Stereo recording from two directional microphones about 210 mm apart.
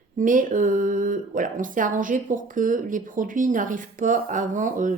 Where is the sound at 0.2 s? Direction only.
40° right (ahead or behind).